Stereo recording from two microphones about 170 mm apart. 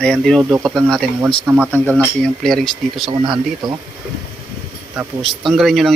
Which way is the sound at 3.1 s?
25° right (ahead or behind).